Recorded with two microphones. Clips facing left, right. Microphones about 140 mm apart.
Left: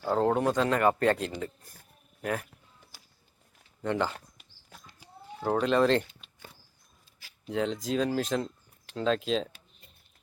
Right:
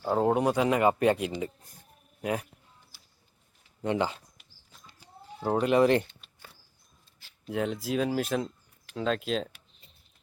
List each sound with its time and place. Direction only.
0.0 s speech: 10° right (ahead or behind)
3.8 s speech: 15° right (ahead or behind)
5.4 s speech: 10° right (ahead or behind)
7.4 s speech: 5° right (ahead or behind)